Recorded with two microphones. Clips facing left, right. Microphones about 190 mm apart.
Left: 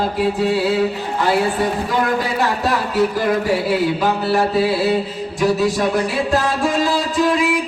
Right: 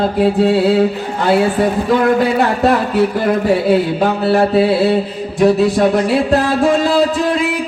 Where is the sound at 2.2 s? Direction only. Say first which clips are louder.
Right 6 dB; 60° right (ahead or behind).